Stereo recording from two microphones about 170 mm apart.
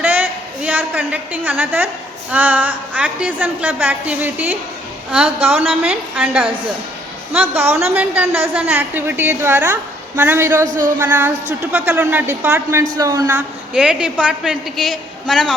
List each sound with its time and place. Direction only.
0.0 s a sound: 10° right (ahead or behind)
2.3 s a woman's voice: 10° right (ahead or behind)
10.7 s speech: 50° right (ahead or behind)
10.9 s a woman's voice: 10° right (ahead or behind)
13.3 s a woman's voice: 5° right (ahead or behind)